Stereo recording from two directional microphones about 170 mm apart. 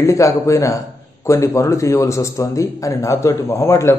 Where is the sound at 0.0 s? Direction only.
20° left (ahead or behind).